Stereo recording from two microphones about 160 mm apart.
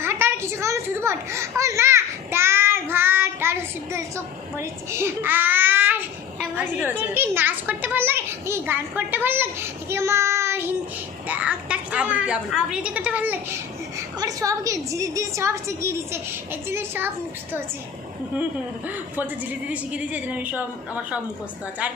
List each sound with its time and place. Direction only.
0.0 s a sound: 15° right (ahead or behind)
4.5 s a child's voice: 15° right (ahead or behind)
18.9 s a child's voice: 10° right (ahead or behind)